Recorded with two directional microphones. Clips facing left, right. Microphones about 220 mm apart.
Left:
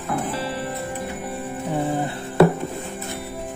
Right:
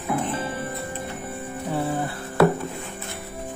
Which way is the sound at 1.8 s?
20° left (ahead or behind).